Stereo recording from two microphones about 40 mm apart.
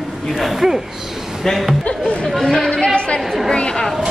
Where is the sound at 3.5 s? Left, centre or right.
Centre.